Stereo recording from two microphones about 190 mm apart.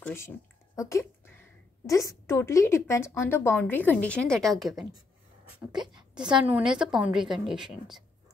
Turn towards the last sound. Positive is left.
turn(degrees=0)  # may be behind; listen again after turning